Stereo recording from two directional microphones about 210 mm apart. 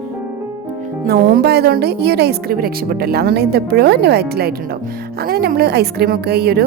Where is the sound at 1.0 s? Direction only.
45° right (ahead or behind).